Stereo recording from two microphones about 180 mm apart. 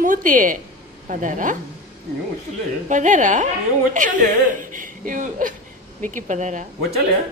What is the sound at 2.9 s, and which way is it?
A woman's voice, 45° right (ahead or behind).